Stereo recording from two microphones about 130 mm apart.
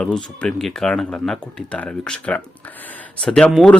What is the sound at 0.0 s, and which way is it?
Speech, 5° left (ahead or behind).